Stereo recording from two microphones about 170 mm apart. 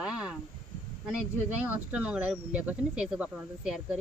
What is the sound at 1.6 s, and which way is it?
Speech, 5° right (ahead or behind).